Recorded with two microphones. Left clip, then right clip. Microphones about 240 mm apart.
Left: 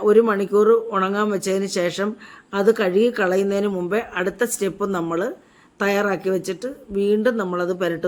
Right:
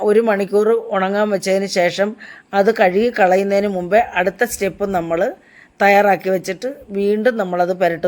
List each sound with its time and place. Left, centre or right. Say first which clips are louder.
0.0 s speech: right 2 dB; centre